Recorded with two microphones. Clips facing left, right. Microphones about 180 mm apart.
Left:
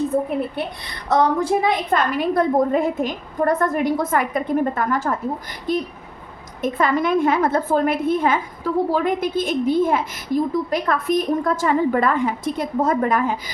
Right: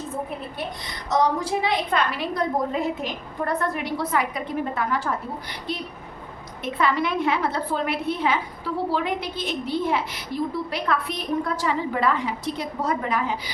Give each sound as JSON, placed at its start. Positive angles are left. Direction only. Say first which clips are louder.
{"t": 1.1, "sound": "a woman's voice", "louder": "left 4 dB", "side_deg": 55}